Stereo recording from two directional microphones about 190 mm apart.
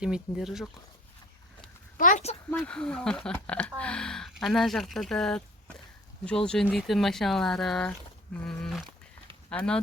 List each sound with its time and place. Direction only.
0.0 s speech: 5° right (ahead or behind)
2.0 s a woman's voice: 40° left (ahead or behind)
2.5 s speech: 10° left (ahead or behind)